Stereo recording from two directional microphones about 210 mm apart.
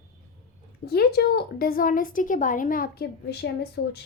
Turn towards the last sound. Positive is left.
turn(degrees=50)  # may be behind; listen again after turning